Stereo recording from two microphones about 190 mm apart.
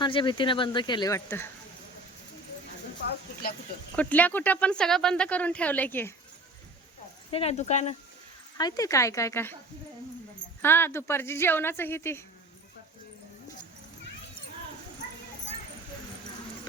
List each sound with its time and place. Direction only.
0.0 s speech: 25° left (ahead or behind)
3.9 s speech: 10° left (ahead or behind)
7.3 s speech: 30° left (ahead or behind)
8.5 s speech: 20° left (ahead or behind)
10.6 s speech: 10° left (ahead or behind)